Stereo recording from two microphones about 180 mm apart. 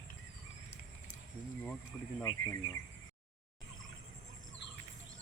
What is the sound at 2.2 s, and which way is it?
Bird, 20° left (ahead or behind).